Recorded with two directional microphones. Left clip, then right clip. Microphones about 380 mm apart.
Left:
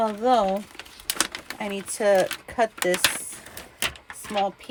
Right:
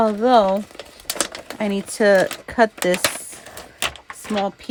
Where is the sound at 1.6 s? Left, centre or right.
Right.